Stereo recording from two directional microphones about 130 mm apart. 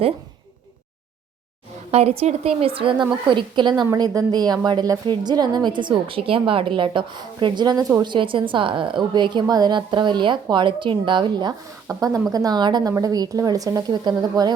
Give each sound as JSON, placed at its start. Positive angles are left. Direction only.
{"t": 1.9, "sound": "a woman's voice", "side_deg": -50}